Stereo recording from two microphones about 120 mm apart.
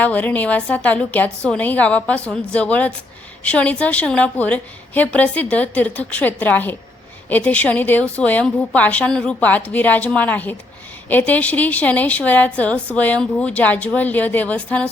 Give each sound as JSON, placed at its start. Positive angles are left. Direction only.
{"t": 0.0, "sound": "a woman's voice", "side_deg": 15}